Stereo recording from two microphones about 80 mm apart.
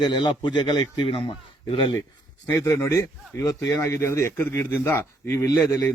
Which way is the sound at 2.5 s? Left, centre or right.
Left.